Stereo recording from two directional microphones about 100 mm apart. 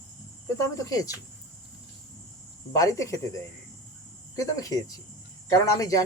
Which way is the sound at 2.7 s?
35° left (ahead or behind).